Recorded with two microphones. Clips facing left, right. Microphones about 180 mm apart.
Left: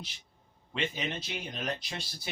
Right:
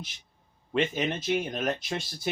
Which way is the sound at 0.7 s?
50° right (ahead or behind).